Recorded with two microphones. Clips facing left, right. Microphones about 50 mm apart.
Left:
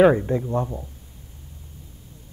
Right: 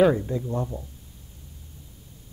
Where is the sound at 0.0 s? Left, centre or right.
Left.